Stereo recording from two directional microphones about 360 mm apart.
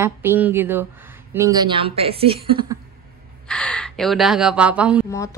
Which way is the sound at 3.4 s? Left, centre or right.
Centre.